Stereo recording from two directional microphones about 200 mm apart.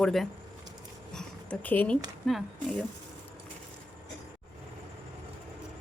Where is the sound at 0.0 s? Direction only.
Centre (ahead or behind).